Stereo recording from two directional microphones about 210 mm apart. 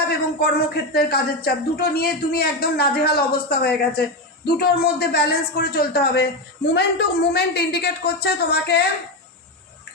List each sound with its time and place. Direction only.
0.1 s speech: 50° left (ahead or behind)